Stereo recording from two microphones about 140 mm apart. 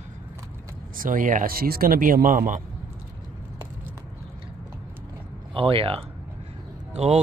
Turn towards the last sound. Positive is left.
turn(degrees=-50)  # may be behind; listen again after turning